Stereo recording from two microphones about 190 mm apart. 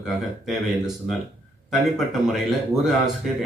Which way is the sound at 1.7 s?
Centre (ahead or behind).